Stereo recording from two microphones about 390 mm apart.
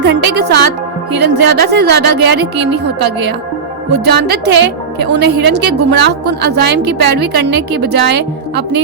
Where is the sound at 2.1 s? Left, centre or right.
Right.